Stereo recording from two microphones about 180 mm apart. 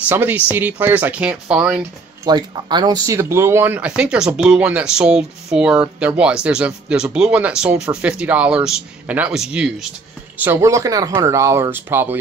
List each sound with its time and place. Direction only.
0.1 s speech: 10° right (ahead or behind)
2.2 s speech: 25° right (ahead or behind)